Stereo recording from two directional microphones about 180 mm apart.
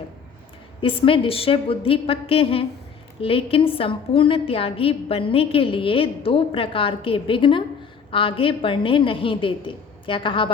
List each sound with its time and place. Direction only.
0.8 s a woman's voice: 30° left (ahead or behind)